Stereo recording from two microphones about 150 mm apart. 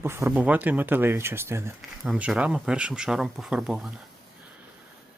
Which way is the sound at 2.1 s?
5° right (ahead or behind).